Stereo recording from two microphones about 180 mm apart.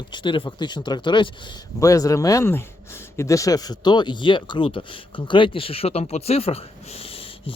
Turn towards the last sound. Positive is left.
turn(degrees=30)  # may be behind; listen again after turning